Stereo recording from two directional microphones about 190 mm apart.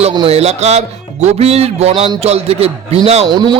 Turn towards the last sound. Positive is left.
turn(degrees=-20)  # may be behind; listen again after turning